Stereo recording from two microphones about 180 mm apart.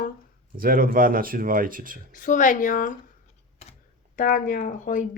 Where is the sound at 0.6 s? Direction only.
50° right (ahead or behind).